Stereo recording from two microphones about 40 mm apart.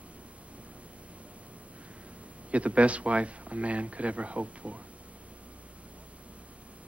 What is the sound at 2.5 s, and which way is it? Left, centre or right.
A woman's voice, right.